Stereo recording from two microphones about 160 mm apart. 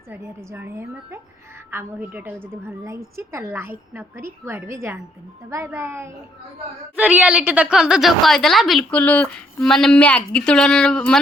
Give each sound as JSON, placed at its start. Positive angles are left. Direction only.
{"t": 0.1, "sound": "a woman's voice", "side_deg": -15}